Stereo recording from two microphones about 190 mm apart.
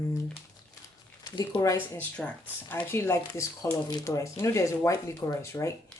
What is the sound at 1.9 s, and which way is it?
Speech, 10° left (ahead or behind).